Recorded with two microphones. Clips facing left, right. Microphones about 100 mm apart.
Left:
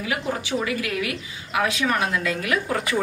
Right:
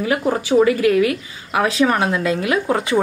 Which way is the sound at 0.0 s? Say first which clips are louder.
Right 8 dB; 40° right (ahead or behind).